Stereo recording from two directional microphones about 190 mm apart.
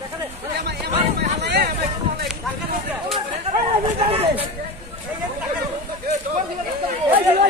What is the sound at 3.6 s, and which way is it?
Speech, 30° right (ahead or behind).